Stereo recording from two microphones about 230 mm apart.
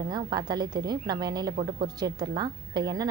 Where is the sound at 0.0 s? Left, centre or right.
Centre.